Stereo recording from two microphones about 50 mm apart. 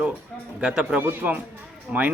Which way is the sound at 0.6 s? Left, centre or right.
Centre.